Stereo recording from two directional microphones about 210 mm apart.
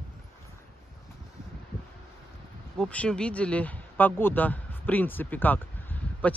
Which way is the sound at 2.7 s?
5° left (ahead or behind).